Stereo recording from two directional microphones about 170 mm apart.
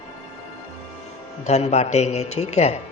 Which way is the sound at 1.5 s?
40° left (ahead or behind).